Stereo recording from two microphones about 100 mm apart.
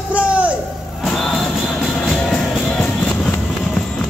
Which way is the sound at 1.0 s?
Centre (ahead or behind).